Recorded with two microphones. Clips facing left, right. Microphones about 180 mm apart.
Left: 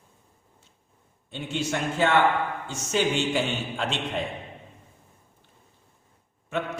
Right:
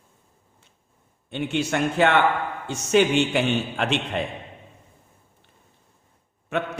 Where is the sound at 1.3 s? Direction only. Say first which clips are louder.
Right 4 dB; 65° right (ahead or behind).